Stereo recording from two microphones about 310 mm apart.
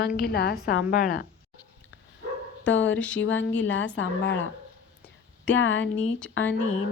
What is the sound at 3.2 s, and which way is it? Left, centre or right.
Speech, left.